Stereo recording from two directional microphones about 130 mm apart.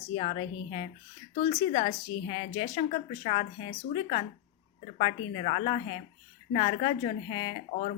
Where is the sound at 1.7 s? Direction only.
80° left.